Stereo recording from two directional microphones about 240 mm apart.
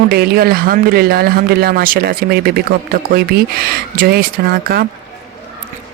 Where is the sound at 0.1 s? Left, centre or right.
Right.